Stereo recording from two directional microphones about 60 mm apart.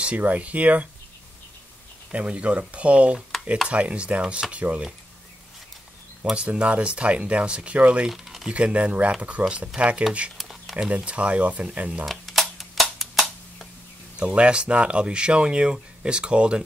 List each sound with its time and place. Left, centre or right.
0.0 s speech: right
2.1 s speech: right
3.2 s stir: centre
3.6 s speech: right
6.3 s speech: centre
8.1 s a sound: centre
8.5 s speech: right
10.3 s a sound: centre
11.1 s speech: right
12.1 s a sound: centre
14.1 s speech: centre